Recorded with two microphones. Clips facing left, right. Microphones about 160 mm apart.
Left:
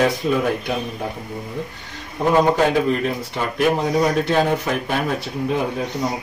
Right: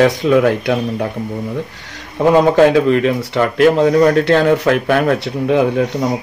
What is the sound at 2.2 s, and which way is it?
A man's voice, 90° right.